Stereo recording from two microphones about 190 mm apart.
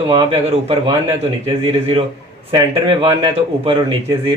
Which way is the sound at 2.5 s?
25° right (ahead or behind).